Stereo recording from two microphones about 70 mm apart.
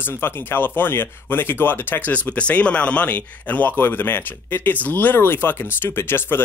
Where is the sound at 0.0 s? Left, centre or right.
Left.